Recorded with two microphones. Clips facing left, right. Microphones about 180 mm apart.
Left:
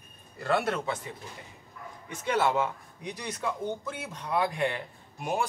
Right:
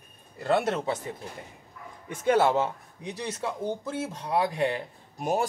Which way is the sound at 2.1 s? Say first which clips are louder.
Right 6 dB; 50° right (ahead or behind).